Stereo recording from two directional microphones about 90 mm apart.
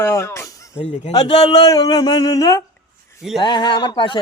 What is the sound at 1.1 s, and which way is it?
Speech, 50° left (ahead or behind).